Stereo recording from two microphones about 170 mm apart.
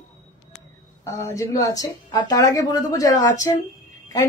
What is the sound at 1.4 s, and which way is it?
A woman's voice, 20° left (ahead or behind).